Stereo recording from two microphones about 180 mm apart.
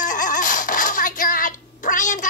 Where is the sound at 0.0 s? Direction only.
45° left (ahead or behind).